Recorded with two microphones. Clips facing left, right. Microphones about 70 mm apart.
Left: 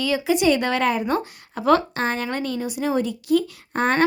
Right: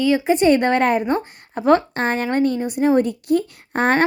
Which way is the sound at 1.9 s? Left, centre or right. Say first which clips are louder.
Right 5 dB; right.